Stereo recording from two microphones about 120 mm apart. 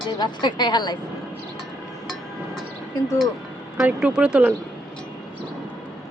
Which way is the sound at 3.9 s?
10° right (ahead or behind).